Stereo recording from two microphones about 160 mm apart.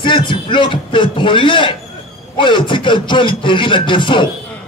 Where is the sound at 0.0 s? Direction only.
30° left (ahead or behind).